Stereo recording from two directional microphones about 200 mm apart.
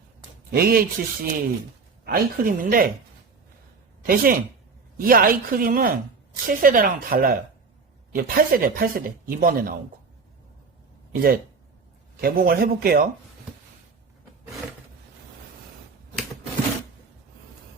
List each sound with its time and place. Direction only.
0.5 s speech: 50° right (ahead or behind)
4.0 s speech: 45° right (ahead or behind)
11.1 s speech: 50° right (ahead or behind)